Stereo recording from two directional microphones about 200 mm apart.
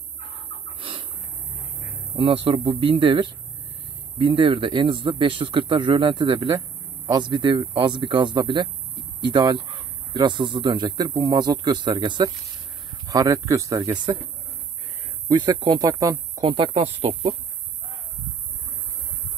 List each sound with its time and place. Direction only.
0.7 s bird: 25° right (ahead or behind)
2.1 s speech: 30° right (ahead or behind)
15.2 s speech: 20° right (ahead or behind)